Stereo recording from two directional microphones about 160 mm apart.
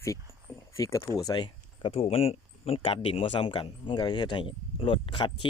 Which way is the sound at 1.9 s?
40° left (ahead or behind).